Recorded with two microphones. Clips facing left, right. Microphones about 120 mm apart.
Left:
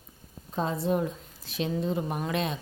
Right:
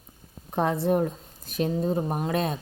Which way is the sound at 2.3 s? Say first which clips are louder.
Right 3 dB; 45° right (ahead or behind).